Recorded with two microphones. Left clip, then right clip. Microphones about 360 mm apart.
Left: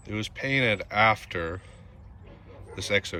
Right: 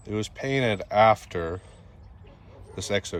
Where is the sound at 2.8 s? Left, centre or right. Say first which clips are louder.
Left 1 dB; centre.